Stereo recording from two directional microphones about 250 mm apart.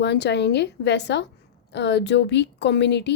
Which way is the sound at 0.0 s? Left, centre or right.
Left.